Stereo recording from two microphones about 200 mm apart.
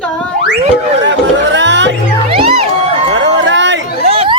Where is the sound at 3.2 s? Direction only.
65° right (ahead or behind).